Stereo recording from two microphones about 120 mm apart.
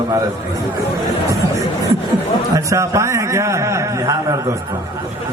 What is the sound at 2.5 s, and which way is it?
A man's voice, 25° right (ahead or behind).